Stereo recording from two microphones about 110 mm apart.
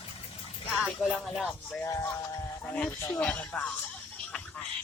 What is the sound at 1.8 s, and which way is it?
Music, 25° left (ahead or behind).